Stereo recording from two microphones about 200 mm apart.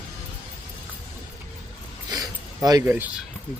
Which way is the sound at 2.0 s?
20° right (ahead or behind).